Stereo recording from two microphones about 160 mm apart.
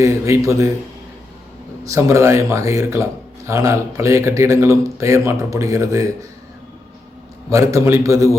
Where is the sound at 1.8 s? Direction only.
20° right (ahead or behind).